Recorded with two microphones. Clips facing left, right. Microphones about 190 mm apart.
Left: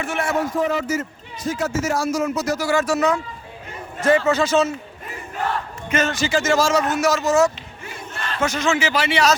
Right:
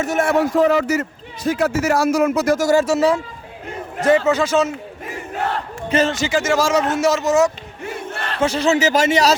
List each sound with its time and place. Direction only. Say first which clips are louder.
0.0 s a man's voice: right 6 dB; 40° right (ahead or behind)
0.3 s speech: right 6 dB; 70° right (ahead or behind); by 2.8 s 45° right (ahead or behind)
2.8 s a man's voice: right 3 dB; 25° right (ahead or behind)
5.9 s a man's voice: right 4 dB; 30° right (ahead or behind)
6.1 s a man's voice: right 1 dB; 15° right (ahead or behind)
6.8 s speech: right 2 dB; 25° right (ahead or behind)
7.9 s battle cry: right 5 dB; 60° right (ahead or behind)
8.4 s a man's voice: right 4 dB; 30° right (ahead or behind)